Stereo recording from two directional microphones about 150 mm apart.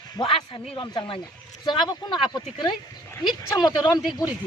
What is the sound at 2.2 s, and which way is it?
Speech, 30° left (ahead or behind).